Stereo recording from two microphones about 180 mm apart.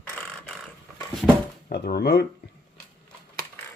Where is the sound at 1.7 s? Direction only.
60° left (ahead or behind).